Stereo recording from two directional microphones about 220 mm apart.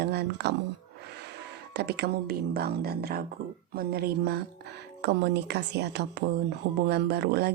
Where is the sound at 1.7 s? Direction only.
50° right (ahead or behind).